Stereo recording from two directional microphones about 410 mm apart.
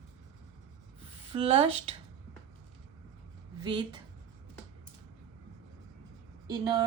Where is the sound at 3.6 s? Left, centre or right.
Centre.